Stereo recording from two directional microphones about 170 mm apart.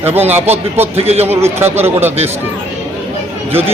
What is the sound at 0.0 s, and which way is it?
Speech, 10° right (ahead or behind).